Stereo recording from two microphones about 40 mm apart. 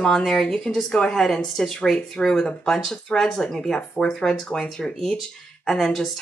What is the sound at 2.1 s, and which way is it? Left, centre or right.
Speech, centre.